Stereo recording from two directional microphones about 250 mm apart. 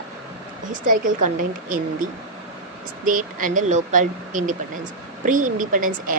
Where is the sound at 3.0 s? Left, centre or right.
Right.